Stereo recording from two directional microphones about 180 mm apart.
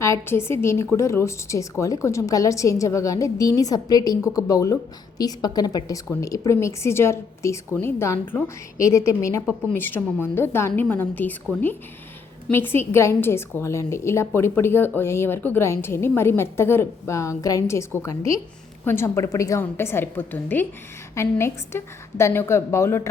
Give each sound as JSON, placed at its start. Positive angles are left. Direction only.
{"t": 0.0, "sound": "a woman's voice", "side_deg": 15}
{"t": 12.5, "sound": "a woman's voice", "side_deg": 10}